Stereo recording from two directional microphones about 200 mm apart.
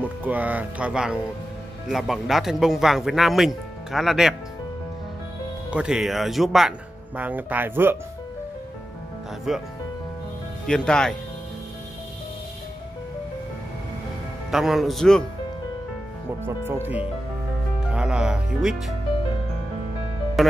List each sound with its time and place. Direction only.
0.2 s speech: 10° right (ahead or behind)
5.7 s speech: 5° right (ahead or behind)
9.5 s speech: 5° right (ahead or behind)
10.7 s speech: 5° left (ahead or behind)
14.5 s speech: centre (ahead or behind)
16.4 s speech: 10° right (ahead or behind)
20.4 s music: centre (ahead or behind)